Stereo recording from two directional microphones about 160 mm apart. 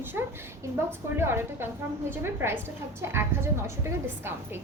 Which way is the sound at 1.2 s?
15° right (ahead or behind).